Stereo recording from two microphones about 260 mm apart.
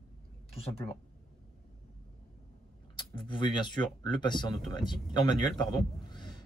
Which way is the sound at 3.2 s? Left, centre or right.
Centre.